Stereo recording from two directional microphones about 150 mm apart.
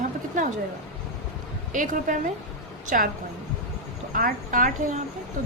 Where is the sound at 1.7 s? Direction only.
60° right (ahead or behind).